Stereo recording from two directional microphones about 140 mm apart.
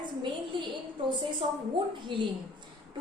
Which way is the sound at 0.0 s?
35° right (ahead or behind).